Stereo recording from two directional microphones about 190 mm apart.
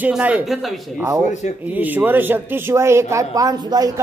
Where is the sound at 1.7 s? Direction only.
10° right (ahead or behind).